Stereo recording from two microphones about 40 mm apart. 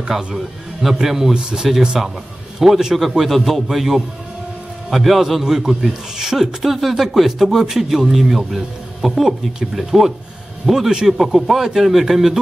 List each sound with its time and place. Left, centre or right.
0.1 s a man's voice: centre
1.3 s speech: centre
2.0 s a man's voice: centre